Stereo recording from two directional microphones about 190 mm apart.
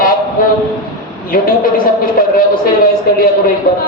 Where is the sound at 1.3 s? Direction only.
50° left (ahead or behind).